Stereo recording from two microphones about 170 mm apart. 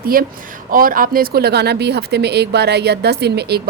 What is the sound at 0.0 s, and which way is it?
A woman's voice, 60° right (ahead or behind).